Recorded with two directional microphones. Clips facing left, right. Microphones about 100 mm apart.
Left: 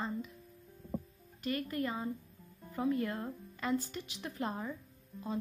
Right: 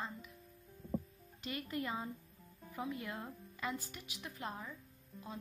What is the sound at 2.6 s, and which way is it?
Speech, 5° right (ahead or behind).